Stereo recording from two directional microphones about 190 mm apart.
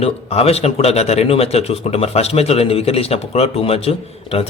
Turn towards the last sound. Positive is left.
turn(degrees=30)  # may be behind; listen again after turning